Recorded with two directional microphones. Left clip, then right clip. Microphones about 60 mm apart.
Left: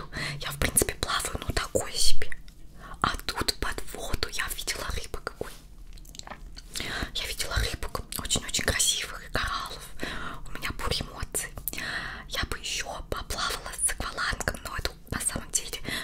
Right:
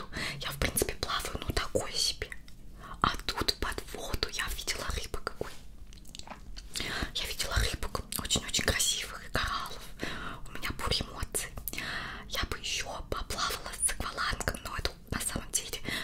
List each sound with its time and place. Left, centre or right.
0.1 s whispering: left
0.5 s whispering: left
1.5 s whispering: left
1.9 s whispering: centre
2.8 s whispering: centre
3.2 s whispering: centre
4.0 s whispering: left
4.8 s whispering: centre
6.7 s whispering: left
7.5 s whispering: centre
8.3 s whispering: left
10.1 s whispering: left
10.8 s whispering: left